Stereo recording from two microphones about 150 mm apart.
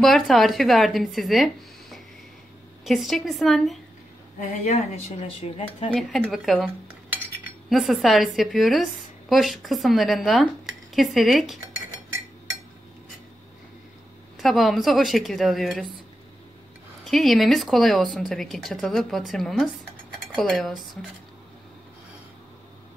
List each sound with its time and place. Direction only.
0.0 s a woman's voice: centre (ahead or behind)
4.4 s speech: 55° left (ahead or behind)
5.4 s speech: 40° left (ahead or behind)
5.9 s a woman's voice: centre (ahead or behind)
7.7 s a woman's voice: centre (ahead or behind)
14.4 s a woman's voice: centre (ahead or behind)
17.0 s a woman's voice: centre (ahead or behind)